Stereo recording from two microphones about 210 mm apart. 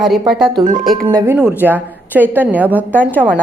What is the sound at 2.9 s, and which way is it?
Speech, 5° left (ahead or behind).